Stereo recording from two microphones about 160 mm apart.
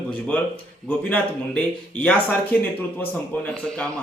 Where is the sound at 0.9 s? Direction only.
10° left (ahead or behind).